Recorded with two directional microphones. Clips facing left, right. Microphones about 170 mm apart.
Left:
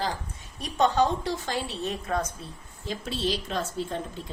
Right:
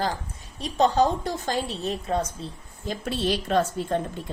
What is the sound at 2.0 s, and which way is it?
Speech, 25° right (ahead or behind).